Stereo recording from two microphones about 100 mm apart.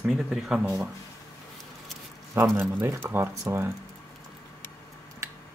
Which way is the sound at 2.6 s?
25° right (ahead or behind).